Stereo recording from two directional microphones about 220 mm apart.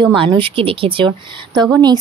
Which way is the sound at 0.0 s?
20° right (ahead or behind).